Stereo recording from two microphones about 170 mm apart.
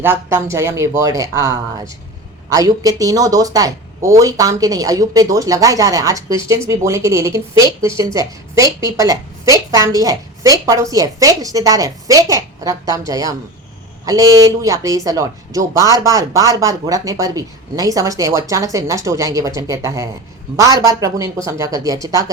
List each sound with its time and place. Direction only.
0.0 s speech: 15° right (ahead or behind)